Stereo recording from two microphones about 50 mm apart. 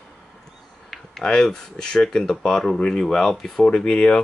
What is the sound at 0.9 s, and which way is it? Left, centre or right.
Speech, centre.